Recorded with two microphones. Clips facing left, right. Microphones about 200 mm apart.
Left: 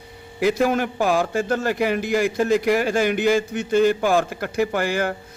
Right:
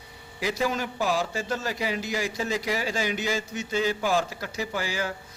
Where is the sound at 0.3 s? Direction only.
55° left (ahead or behind).